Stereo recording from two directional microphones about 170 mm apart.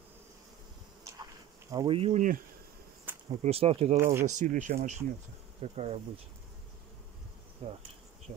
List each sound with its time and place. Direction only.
1.7 s insect: 25° right (ahead or behind)
2.0 s speech: 35° right (ahead or behind)
3.3 s speech: 35° right (ahead or behind)
3.9 s speech: 15° right (ahead or behind)
4.4 s speech: 50° right (ahead or behind)
7.6 s speech: 35° right (ahead or behind)